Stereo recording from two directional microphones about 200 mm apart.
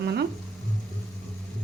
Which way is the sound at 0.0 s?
55° right (ahead or behind).